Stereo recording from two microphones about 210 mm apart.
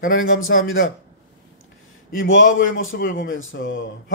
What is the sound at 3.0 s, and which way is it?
Speech, 45° left (ahead or behind).